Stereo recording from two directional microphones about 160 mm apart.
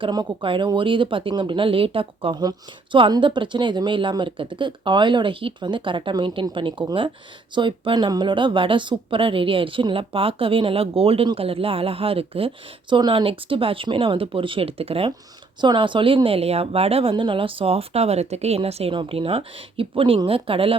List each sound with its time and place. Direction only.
0.0 s speech: 30° right (ahead or behind)